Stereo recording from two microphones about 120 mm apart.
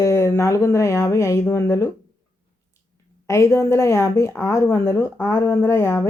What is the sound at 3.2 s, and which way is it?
A woman's voice, 25° left (ahead or behind).